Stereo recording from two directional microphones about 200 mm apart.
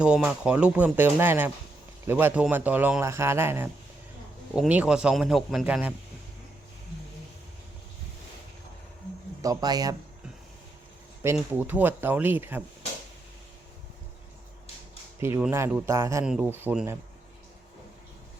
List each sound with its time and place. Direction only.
0.0 s a man's voice: 5° right (ahead or behind)
9.4 s speech: 20° right (ahead or behind)
11.2 s a man's voice: 10° right (ahead or behind)
15.2 s a man's voice: 10° right (ahead or behind)
16.2 s a man's voice: 5° right (ahead or behind)